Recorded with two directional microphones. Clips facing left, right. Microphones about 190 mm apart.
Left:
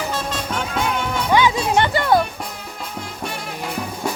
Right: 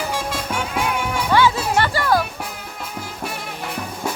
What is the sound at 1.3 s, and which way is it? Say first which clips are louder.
Music: left 1 dB; 15° left (ahead or behind).